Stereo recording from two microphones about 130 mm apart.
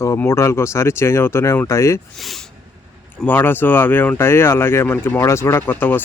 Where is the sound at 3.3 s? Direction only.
15° left (ahead or behind).